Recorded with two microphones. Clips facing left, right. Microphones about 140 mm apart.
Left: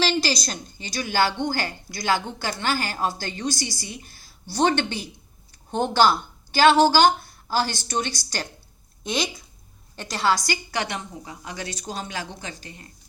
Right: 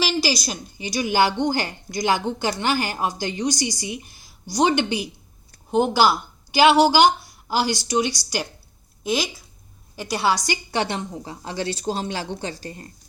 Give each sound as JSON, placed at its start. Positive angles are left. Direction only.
{"t": 0.0, "sound": "a woman's voice", "side_deg": -10}